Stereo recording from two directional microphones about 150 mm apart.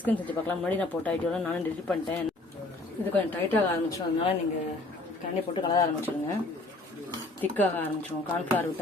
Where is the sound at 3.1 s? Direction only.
10° left (ahead or behind).